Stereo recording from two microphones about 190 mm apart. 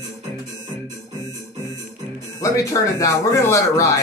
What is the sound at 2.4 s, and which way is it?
Speech, 15° left (ahead or behind).